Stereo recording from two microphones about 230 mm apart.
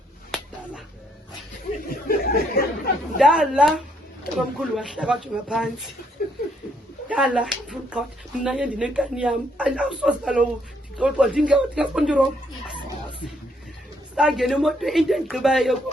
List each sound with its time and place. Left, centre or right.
1.9 s a sound: left
3.2 s a woman's voice: centre
7.1 s a woman's voice: centre
14.2 s a woman's voice: centre